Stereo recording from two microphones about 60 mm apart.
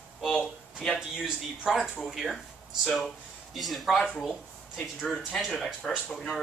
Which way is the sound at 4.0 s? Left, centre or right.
Centre.